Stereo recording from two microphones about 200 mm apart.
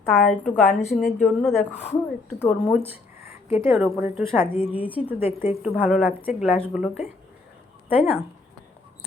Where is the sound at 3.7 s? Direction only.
Centre (ahead or behind).